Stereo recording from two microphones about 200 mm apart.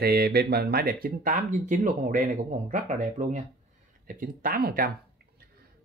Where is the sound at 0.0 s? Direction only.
50° right (ahead or behind).